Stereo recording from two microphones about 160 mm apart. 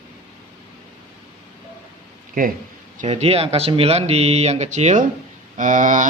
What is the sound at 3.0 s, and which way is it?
A man's voice, 40° right (ahead or behind).